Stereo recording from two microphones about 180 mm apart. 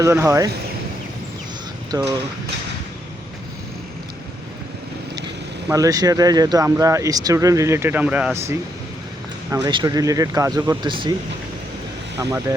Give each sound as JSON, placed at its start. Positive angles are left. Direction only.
{"t": 0.0, "sound": "speech", "side_deg": -15}
{"t": 1.9, "sound": "speech", "side_deg": -20}
{"t": 5.7, "sound": "speech", "side_deg": -20}
{"t": 9.6, "sound": "speech", "side_deg": -25}
{"t": 12.1, "sound": "speech", "side_deg": -20}